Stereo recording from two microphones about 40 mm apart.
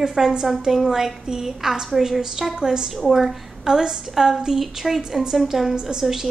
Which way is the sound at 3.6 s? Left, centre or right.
Centre.